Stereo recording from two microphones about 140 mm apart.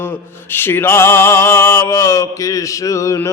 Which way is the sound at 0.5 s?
15° left (ahead or behind).